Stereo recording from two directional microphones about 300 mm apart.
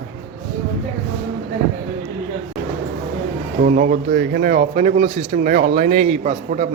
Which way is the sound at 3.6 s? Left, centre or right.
Right.